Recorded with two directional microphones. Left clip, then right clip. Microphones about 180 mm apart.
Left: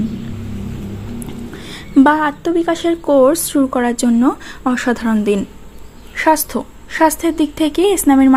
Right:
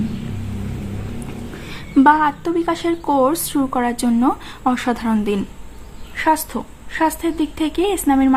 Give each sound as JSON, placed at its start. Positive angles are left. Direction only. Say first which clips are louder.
{"t": 1.7, "sound": "a woman's voice", "louder": "left 1 dB", "side_deg": 25}